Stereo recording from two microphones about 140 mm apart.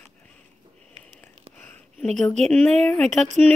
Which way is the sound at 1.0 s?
50° right (ahead or behind).